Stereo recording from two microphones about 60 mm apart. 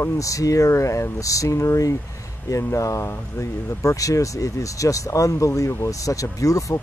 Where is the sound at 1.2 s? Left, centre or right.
Left.